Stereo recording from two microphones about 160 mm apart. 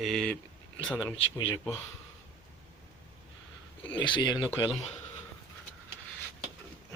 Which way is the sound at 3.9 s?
30° left (ahead or behind).